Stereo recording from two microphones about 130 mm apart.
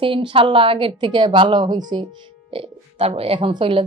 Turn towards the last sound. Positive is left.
turn(degrees=-40)  # may be behind; listen again after turning